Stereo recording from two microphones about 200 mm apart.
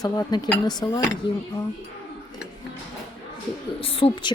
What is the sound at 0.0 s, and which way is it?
Speech, 20° left (ahead or behind).